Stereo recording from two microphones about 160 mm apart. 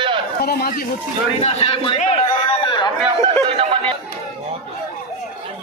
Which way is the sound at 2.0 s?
40° left (ahead or behind).